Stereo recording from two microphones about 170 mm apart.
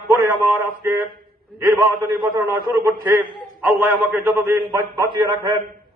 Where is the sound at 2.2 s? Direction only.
25° right (ahead or behind).